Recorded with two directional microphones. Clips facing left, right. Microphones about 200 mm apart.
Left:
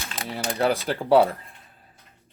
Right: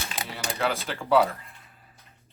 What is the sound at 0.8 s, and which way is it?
Speech, 35° left (ahead or behind).